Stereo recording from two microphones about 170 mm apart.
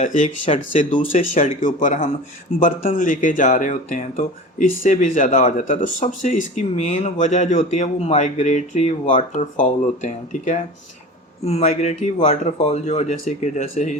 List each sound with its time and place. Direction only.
0.0 s speech: 50° left (ahead or behind)
0.4 s speech: 35° left (ahead or behind)
0.8 s speech: 50° left (ahead or behind)